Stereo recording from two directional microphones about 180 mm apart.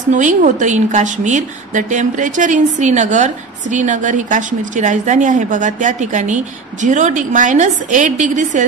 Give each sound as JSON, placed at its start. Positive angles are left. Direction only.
{"t": 0.1, "sound": "a woman's voice", "side_deg": -45}